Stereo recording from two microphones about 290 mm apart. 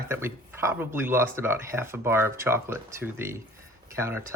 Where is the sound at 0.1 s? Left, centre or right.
Centre.